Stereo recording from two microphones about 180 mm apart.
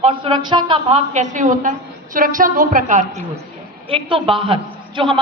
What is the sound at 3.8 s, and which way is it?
A woman's voice, 30° right (ahead or behind).